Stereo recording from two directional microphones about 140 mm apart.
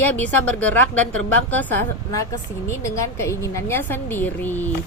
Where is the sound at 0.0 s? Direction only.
10° left (ahead or behind).